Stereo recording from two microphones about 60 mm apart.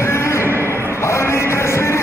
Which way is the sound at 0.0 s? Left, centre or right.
Left.